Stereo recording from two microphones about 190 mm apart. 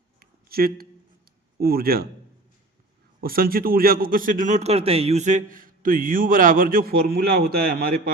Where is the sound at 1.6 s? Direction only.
50° right (ahead or behind).